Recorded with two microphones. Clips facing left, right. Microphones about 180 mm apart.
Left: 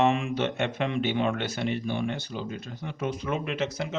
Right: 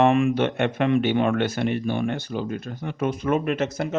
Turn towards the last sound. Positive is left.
turn(degrees=-50)  # may be behind; listen again after turning